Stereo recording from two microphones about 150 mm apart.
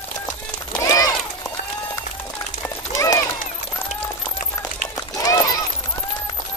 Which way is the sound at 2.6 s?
20° left (ahead or behind).